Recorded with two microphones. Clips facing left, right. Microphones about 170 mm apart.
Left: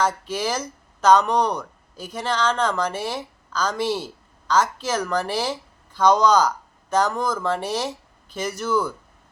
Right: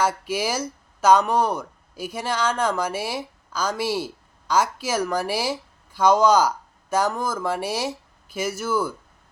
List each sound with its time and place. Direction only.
0.0 s speech: 10° right (ahead or behind)